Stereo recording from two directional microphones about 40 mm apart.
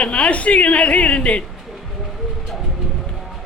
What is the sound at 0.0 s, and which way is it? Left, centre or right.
Speech, left.